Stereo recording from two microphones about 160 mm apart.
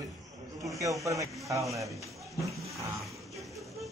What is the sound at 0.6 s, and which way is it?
Speech, 20° right (ahead or behind).